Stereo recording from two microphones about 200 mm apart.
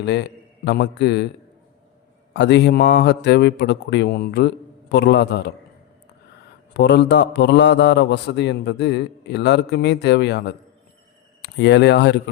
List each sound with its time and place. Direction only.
0.0 s a man's voice: 60° left (ahead or behind)
2.3 s a man's voice: 60° left (ahead or behind)
6.7 s a man's voice: 60° left (ahead or behind)